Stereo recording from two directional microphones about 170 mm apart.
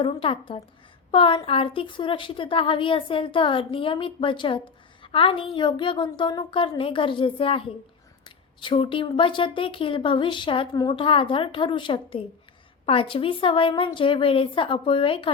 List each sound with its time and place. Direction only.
0.0 s a woman's voice: 35° left (ahead or behind)